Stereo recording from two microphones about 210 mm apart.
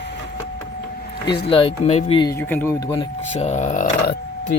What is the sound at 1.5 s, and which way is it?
Speech, 25° left (ahead or behind).